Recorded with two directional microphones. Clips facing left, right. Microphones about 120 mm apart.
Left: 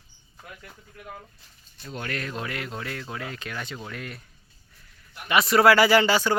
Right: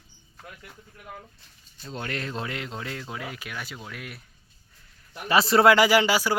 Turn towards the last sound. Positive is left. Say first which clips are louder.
# left 1 dB
turn(degrees=-10)  # may be behind; listen again after turning